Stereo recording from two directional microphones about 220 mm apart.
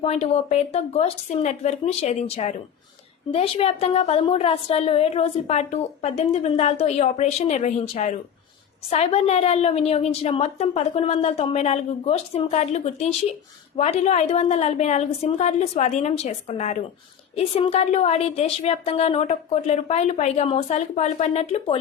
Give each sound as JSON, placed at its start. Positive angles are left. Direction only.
{"t": 0.0, "sound": "a woman's voice", "side_deg": 30}